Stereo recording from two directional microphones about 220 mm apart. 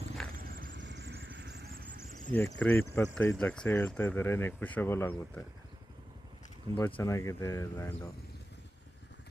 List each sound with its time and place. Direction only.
0.3 s vehicle: 40° right (ahead or behind)
0.7 s vehicle: 55° right (ahead or behind)
2.3 s speech: 10° left (ahead or behind)
6.7 s speech: 10° left (ahead or behind)